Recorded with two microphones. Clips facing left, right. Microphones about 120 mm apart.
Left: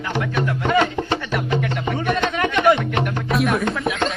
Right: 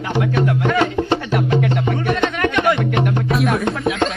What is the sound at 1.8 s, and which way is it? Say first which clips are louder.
Music: right 2 dB; centre (ahead or behind).